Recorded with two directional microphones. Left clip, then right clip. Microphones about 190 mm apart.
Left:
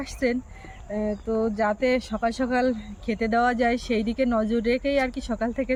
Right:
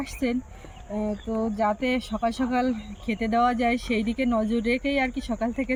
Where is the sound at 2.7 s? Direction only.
35° left (ahead or behind).